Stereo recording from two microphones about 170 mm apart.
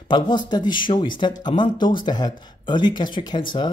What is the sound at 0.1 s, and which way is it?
Speech, 25° left (ahead or behind).